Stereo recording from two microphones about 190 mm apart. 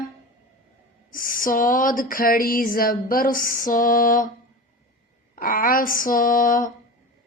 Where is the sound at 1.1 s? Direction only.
45° left (ahead or behind).